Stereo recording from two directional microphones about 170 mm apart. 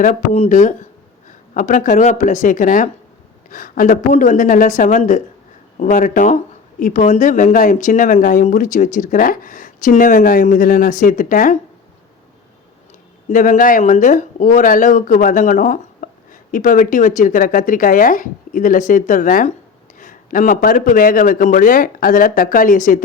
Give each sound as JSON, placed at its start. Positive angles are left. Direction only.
{"t": 0.0, "sound": "speech", "side_deg": 45}
{"t": 13.3, "sound": "speech", "side_deg": 50}